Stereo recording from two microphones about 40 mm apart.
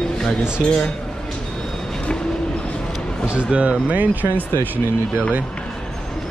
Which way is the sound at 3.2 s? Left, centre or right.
Right.